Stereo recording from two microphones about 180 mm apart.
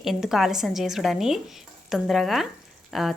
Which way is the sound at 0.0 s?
Centre (ahead or behind).